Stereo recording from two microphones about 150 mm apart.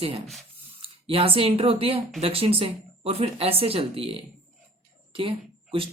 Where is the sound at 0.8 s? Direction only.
40° right (ahead or behind).